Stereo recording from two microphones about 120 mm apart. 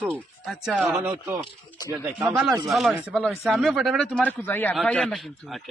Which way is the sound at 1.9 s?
15° right (ahead or behind).